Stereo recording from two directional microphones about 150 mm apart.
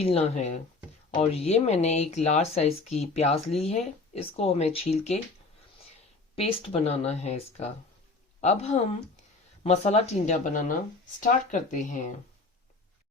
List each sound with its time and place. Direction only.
0.0 s speech: 45° left (ahead or behind)
6.3 s speech: 40° left (ahead or behind); by 12.1 s 55° left (ahead or behind)